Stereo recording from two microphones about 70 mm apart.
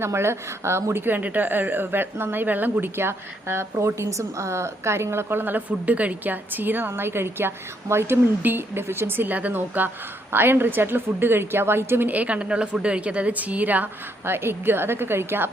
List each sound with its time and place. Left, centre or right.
0.0 s a woman's voice: right
1.0 s a woman's voice: right